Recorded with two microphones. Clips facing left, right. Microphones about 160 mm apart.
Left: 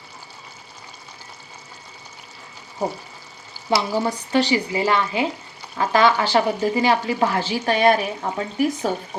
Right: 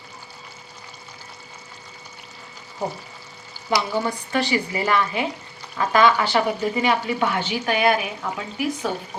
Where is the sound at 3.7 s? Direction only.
30° left (ahead or behind).